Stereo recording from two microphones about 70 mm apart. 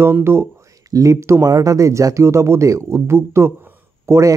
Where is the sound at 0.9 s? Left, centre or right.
Right.